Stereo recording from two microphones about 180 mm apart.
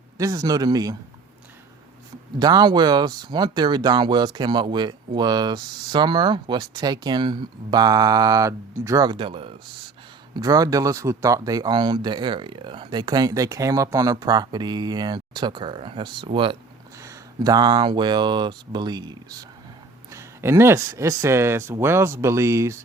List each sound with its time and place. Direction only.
0.2 s speech: 20° right (ahead or behind)
2.4 s speech: 20° right (ahead or behind)